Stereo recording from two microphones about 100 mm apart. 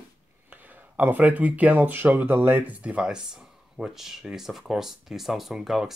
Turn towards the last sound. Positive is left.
turn(degrees=-5)  # may be behind; listen again after turning